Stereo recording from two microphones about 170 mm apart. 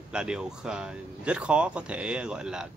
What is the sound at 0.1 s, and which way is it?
Speech, 5° right (ahead or behind).